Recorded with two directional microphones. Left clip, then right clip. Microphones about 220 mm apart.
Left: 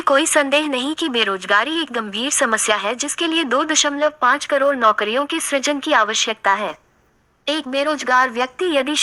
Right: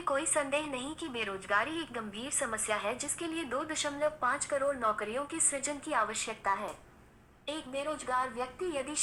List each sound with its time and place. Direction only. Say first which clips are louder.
0.0 s speech: left 16 dB; 40° left (ahead or behind)